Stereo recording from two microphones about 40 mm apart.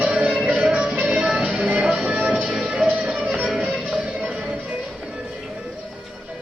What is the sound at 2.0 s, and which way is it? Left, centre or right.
Music, right.